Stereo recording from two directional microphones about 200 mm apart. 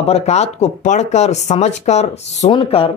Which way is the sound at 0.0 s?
30° left (ahead or behind).